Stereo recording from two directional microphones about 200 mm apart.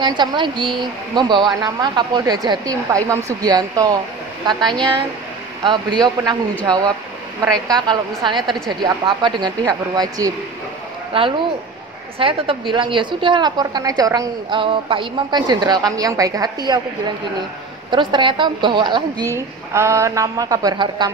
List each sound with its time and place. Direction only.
0.2 s a woman's voice: 20° right (ahead or behind)
7.6 s a woman's voice: 20° right (ahead or behind)
17.9 s a woman's voice: 25° right (ahead or behind)